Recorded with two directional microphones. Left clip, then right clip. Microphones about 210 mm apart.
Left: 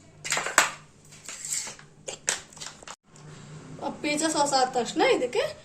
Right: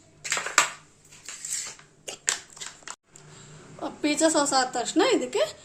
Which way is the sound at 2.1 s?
15° right (ahead or behind).